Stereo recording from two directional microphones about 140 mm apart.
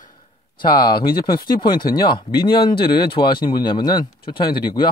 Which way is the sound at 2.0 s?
35° left (ahead or behind).